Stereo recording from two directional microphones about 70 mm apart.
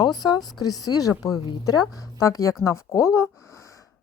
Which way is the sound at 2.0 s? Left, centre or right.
Left.